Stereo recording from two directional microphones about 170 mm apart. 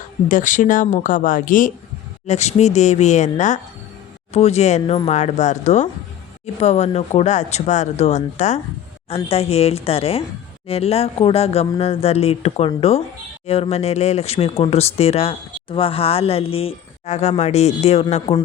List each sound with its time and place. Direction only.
0.3 s speech: 50° left (ahead or behind)
2.2 s speech: 40° left (ahead or behind)